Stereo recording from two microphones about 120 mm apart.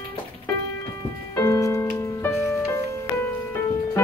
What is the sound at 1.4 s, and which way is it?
Music, 25° left (ahead or behind).